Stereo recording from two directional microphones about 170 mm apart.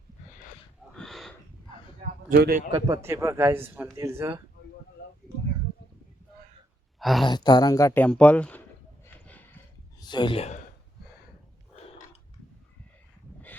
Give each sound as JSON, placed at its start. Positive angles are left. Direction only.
{"t": 0.9, "sound": "gasp", "side_deg": 0}
{"t": 2.3, "sound": "a man's voice", "side_deg": -65}
{"t": 2.7, "sound": "a man's voice", "side_deg": -20}
{"t": 7.0, "sound": "speech", "side_deg": 0}
{"t": 7.3, "sound": "speech", "side_deg": 25}
{"t": 9.0, "sound": "a sound", "side_deg": 10}
{"t": 10.0, "sound": "speech", "side_deg": 25}